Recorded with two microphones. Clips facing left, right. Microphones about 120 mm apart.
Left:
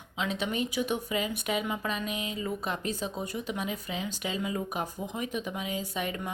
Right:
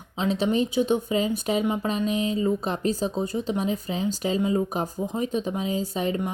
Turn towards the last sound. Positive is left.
turn(degrees=-30)  # may be behind; listen again after turning